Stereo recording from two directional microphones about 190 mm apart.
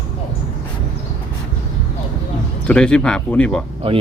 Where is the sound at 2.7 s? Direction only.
5° left (ahead or behind).